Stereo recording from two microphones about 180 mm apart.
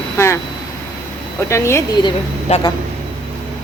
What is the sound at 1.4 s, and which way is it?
Speech, 15° left (ahead or behind).